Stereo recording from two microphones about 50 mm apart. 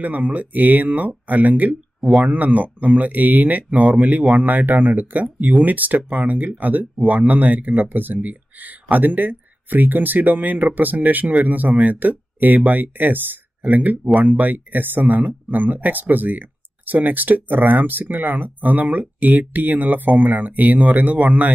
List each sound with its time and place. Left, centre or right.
0.0 s speech: right
2.0 s a sound: centre
2.2 s speech: right